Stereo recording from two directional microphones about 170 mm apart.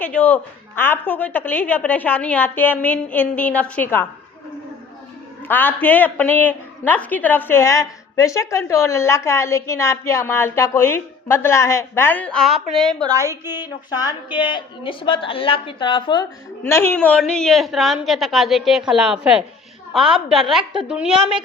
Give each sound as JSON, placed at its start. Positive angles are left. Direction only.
{"t": 0.0, "sound": "a woman's voice", "side_deg": 10}
{"t": 5.5, "sound": "a woman's voice", "side_deg": 10}
{"t": 13.0, "sound": "a woman's voice", "side_deg": -20}
{"t": 13.9, "sound": "a woman's voice", "side_deg": 25}
{"t": 16.6, "sound": "a woman's voice", "side_deg": 15}